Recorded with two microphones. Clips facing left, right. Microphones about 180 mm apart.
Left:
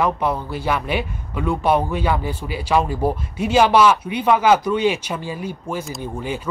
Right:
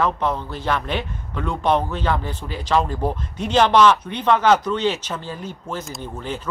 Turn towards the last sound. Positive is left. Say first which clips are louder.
# left 3 dB
turn(degrees=10)  # may be behind; listen again after turning